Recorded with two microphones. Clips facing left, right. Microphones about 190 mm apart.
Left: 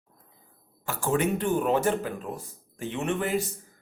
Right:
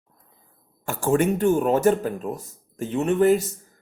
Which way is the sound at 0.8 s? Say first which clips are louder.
Right 5 dB; 45° right (ahead or behind).